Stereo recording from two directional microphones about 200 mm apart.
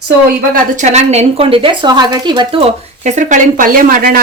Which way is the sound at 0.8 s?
35° right (ahead or behind).